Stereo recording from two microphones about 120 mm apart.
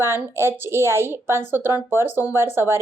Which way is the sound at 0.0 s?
20° right (ahead or behind).